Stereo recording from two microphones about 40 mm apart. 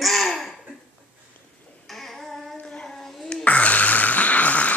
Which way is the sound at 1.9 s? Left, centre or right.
Centre.